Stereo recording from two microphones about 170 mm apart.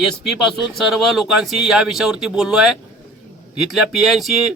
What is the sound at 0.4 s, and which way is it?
A man's voice, centre (ahead or behind).